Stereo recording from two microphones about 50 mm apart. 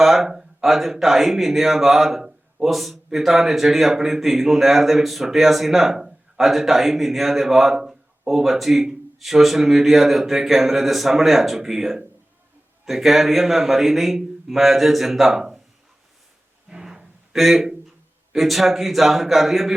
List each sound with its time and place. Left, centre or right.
0.0 s speech: centre
16.6 s a sound: centre
18.3 s speech: centre